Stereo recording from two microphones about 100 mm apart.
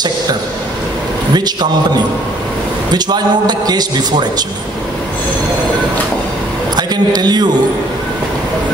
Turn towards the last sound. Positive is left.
turn(degrees=-45)  # may be behind; listen again after turning